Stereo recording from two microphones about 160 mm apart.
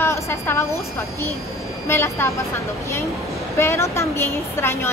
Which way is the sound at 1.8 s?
15° left (ahead or behind).